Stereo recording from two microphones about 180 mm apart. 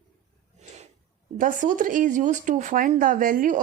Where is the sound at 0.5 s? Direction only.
40° right (ahead or behind).